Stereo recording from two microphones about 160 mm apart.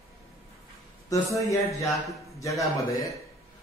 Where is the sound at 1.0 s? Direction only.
20° left (ahead or behind).